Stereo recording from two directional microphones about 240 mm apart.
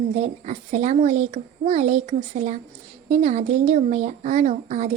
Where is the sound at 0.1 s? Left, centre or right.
Right.